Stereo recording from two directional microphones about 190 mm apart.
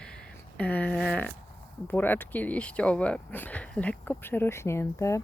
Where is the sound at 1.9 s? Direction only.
10° left (ahead or behind).